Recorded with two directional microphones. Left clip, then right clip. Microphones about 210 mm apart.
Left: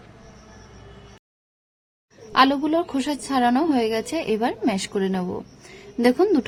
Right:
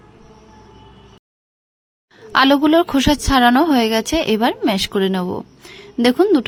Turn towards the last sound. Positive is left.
turn(degrees=-25)  # may be behind; listen again after turning